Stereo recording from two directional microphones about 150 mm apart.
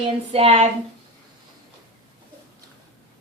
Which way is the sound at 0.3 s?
40° right (ahead or behind).